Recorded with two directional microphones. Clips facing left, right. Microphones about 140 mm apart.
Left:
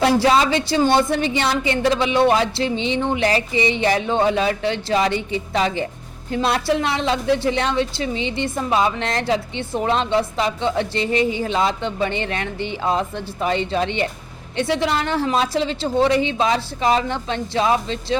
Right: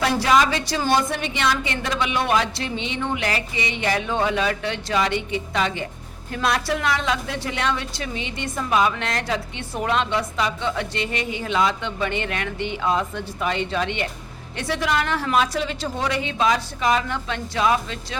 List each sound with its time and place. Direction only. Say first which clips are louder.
0.0 s a woman's voice: left 3 dB; 30° left (ahead or behind)